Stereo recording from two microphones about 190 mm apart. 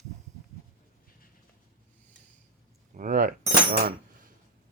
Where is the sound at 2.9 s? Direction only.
45° right (ahead or behind).